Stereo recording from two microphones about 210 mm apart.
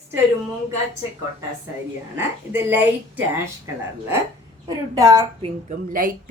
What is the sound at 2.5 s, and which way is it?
Speech, 10° right (ahead or behind).